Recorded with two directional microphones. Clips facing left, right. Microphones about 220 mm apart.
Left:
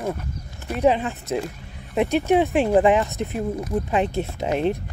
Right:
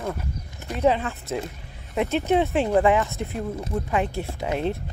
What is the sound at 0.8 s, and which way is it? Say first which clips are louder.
Speech: left 2 dB; 15° left (ahead or behind).